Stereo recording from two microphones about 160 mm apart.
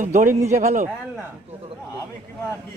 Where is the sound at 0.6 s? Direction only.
50° right (ahead or behind).